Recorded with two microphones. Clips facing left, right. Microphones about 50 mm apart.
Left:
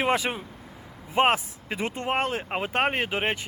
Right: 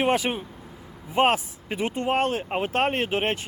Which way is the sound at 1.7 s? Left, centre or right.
Left.